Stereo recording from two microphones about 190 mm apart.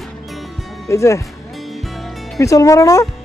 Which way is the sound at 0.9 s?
15° left (ahead or behind).